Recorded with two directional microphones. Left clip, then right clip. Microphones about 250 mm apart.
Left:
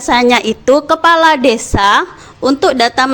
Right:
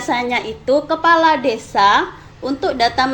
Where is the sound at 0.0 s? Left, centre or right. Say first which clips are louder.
Left 9 dB; left.